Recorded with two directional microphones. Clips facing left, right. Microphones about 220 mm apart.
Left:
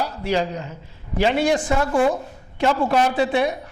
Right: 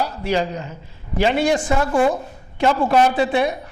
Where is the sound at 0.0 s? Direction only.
15° right (ahead or behind).